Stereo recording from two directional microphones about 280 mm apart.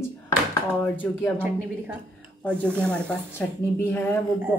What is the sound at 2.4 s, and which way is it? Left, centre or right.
Speech, centre.